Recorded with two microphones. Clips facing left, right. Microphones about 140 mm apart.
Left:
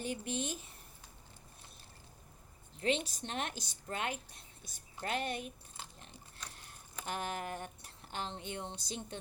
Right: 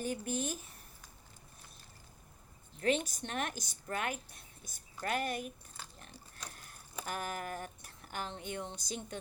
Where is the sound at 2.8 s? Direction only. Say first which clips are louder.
Right 2 dB; 30° left (ahead or behind).